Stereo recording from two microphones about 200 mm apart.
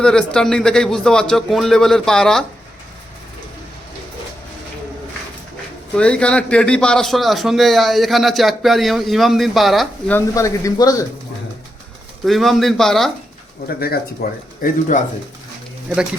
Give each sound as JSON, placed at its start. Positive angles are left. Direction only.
{"t": 0.0, "sound": "a man's voice", "side_deg": 5}
{"t": 6.0, "sound": "a man's voice", "side_deg": 5}
{"t": 10.2, "sound": "speech", "side_deg": 15}
{"t": 12.2, "sound": "a man's voice", "side_deg": 0}
{"t": 13.7, "sound": "speech", "side_deg": 50}